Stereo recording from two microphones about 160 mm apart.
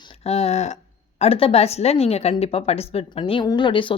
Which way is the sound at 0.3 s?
40° left (ahead or behind).